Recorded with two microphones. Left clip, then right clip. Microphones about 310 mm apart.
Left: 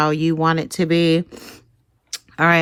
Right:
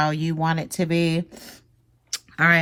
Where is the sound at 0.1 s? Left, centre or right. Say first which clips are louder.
Left 7 dB; centre.